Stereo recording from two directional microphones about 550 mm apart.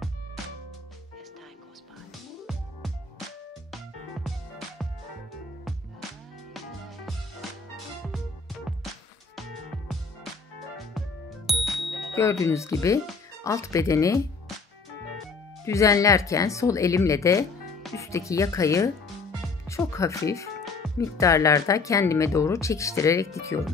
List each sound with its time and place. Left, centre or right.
4.8 s music: centre
11.0 s music: centre
15.6 s speech: centre